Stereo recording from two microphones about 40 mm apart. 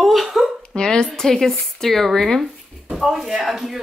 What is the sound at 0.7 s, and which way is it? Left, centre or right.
Speech, centre.